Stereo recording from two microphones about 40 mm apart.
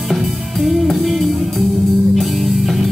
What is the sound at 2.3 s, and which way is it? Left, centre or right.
Music, centre.